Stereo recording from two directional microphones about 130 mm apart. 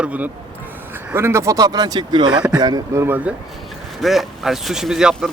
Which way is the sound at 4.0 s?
Centre (ahead or behind).